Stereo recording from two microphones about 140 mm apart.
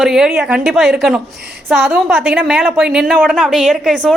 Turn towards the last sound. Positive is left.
turn(degrees=0)  # may be behind; listen again after turning